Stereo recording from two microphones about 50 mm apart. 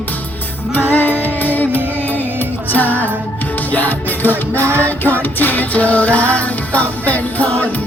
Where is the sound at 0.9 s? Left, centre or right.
Left.